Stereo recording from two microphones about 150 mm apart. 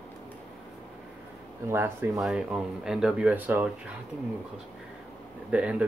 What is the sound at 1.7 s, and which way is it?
Speech, 15° right (ahead or behind).